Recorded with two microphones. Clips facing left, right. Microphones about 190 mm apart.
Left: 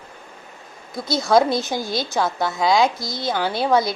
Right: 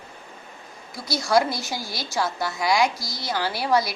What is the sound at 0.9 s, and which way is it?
A woman's voice, 20° left (ahead or behind).